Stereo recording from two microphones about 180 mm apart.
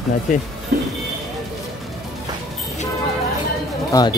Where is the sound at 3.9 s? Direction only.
20° left (ahead or behind).